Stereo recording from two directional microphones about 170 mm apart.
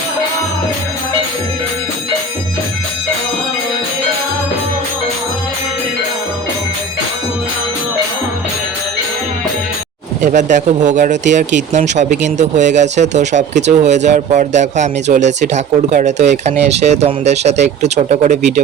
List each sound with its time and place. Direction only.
10.2 s speech: 45° right (ahead or behind)